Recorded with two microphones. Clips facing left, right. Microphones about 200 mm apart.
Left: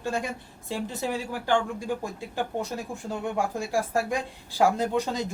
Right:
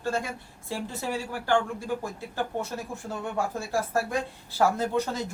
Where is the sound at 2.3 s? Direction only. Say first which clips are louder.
Left 1 dB; 15° left (ahead or behind).